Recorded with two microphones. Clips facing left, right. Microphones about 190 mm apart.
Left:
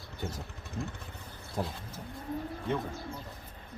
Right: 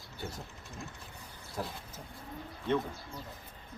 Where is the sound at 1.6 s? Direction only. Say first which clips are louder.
Left 4 dB; 25° left (ahead or behind).